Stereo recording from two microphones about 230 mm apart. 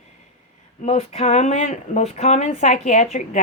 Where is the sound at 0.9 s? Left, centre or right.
Left.